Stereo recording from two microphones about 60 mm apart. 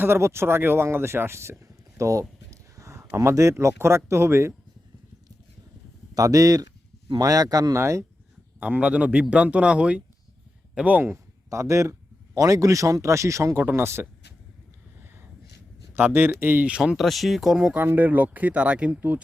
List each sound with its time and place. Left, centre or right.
0.0 s speech: right
6.1 s speech: right
7.8 s speech: right
8.6 s speech: right
11.4 s speech: right
13.6 s speech: right
16.0 s speech: right
16.6 s speech: centre
16.9 s speech: centre
17.7 s speech: right